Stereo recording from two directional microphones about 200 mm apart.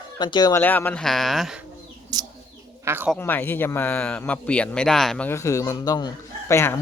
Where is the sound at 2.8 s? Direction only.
10° right (ahead or behind).